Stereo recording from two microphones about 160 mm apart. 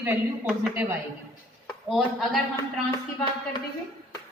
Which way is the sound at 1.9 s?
Centre (ahead or behind).